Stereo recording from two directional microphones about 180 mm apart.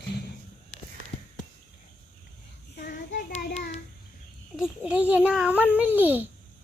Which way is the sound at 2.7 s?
60° left (ahead or behind).